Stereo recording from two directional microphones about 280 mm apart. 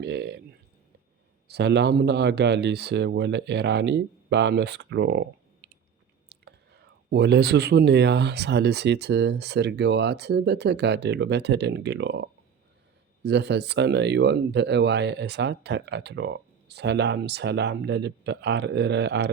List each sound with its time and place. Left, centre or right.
0.0 s speech: right
1.5 s speech: right
6.3 s whispering: right
7.1 s speech: right